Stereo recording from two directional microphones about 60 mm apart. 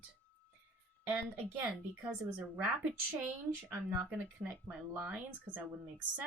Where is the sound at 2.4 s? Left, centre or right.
Right.